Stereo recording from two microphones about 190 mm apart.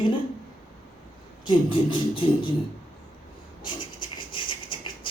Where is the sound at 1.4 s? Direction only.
25° left (ahead or behind).